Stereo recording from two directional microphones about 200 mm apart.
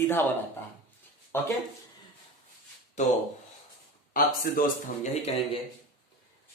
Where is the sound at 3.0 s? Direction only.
35° left (ahead or behind).